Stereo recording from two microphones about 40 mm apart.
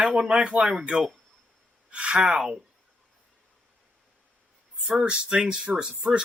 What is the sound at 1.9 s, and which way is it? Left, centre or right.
Speech, right.